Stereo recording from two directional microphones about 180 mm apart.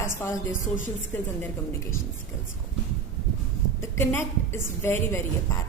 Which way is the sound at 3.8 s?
10° left (ahead or behind).